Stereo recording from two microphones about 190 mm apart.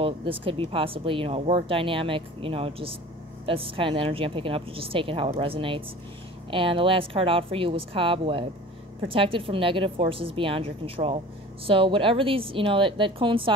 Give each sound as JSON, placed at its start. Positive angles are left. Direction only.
{"t": 0.0, "sound": "speech", "side_deg": -30}